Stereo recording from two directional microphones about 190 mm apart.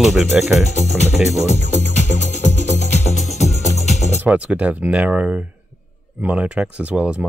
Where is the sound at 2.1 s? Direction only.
40° left (ahead or behind).